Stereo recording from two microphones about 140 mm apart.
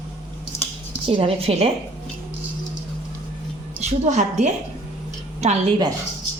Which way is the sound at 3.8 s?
60° right (ahead or behind).